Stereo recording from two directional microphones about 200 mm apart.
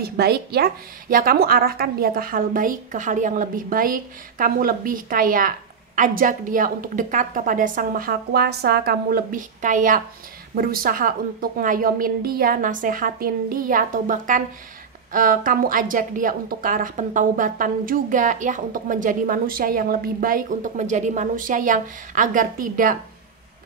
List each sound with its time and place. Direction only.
0.0 s a woman's voice: 50° right (ahead or behind)